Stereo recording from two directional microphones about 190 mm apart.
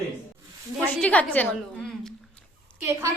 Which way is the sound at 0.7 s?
5° left (ahead or behind).